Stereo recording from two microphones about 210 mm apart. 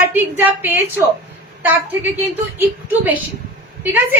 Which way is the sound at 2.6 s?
10° right (ahead or behind).